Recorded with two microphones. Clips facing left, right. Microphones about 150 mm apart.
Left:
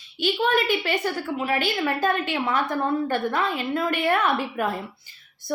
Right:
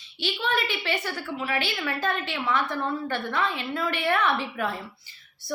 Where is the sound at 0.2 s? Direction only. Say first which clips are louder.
Left 6 dB; 50° left (ahead or behind).